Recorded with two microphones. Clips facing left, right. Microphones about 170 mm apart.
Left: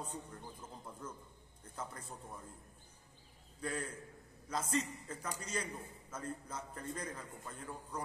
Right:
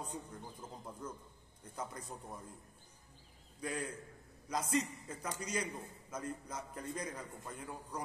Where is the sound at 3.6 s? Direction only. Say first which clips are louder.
Right 1 dB; 10° right (ahead or behind).